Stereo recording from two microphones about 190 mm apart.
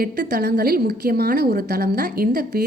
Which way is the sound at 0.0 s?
60° right (ahead or behind).